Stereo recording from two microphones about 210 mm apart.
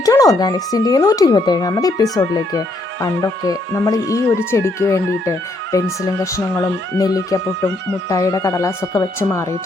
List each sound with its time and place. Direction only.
0.0 s speech: 15° left (ahead or behind)